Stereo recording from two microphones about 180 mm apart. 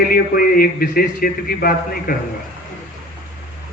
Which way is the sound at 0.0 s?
55° left (ahead or behind).